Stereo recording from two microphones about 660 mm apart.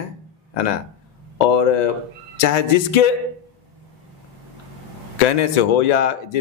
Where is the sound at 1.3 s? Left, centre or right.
Left.